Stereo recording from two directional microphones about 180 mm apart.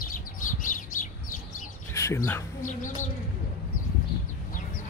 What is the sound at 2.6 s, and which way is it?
Bird, 45° left (ahead or behind).